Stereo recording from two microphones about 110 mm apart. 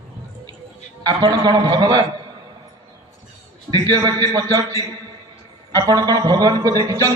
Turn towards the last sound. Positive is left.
turn(degrees=-30)  # may be behind; listen again after turning